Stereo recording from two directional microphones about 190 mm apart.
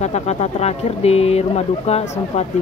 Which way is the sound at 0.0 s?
35° left (ahead or behind).